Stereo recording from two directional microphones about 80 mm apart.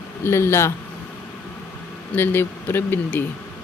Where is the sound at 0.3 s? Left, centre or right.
Left.